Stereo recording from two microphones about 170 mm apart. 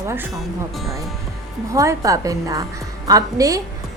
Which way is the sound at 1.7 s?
20° right (ahead or behind).